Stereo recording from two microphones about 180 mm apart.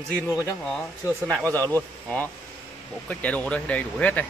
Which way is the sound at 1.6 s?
20° right (ahead or behind).